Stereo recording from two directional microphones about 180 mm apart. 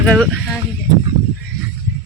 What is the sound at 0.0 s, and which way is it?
Speech, 5° left (ahead or behind).